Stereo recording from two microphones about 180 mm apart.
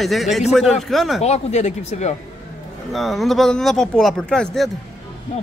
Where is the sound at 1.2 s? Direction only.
40° left (ahead or behind).